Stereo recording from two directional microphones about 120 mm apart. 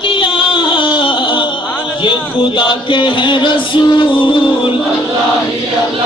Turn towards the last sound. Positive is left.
turn(degrees=45)  # may be behind; listen again after turning